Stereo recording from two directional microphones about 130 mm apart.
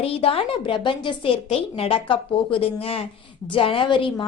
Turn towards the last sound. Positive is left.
turn(degrees=40)  # may be behind; listen again after turning